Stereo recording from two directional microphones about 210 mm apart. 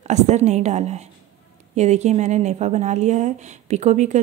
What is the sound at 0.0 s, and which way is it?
Speech, 30° right (ahead or behind).